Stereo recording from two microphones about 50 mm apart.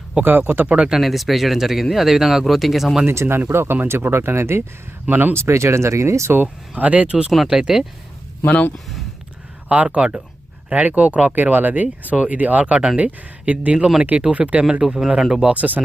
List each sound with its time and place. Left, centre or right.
0.2 s speech: right
0.9 s speech: centre
3.1 s speech: right
5.0 s speech: right
5.3 s speech: right
6.7 s speech: right
7.5 s speech: centre
8.4 s speech: left
9.6 s speech: right
14.6 s speech: centre
15.5 s speech: right